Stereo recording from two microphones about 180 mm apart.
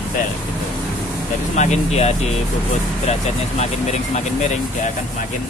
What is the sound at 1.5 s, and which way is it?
Speech, 40° left (ahead or behind).